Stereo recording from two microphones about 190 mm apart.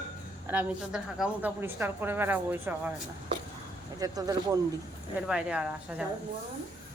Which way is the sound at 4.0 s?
20° right (ahead or behind).